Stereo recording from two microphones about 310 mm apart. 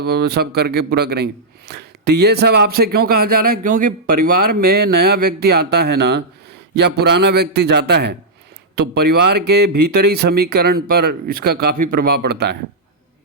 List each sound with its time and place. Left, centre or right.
0.0 s a man's voice: right